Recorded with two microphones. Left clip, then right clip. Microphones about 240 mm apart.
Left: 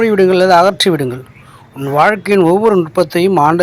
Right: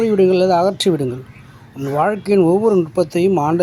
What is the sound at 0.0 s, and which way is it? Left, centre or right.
Speech, centre.